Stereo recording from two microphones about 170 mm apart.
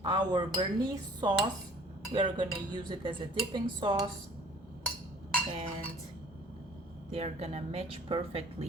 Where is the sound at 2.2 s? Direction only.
30° right (ahead or behind).